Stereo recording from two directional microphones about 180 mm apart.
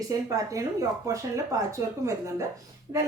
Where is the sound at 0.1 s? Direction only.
20° right (ahead or behind).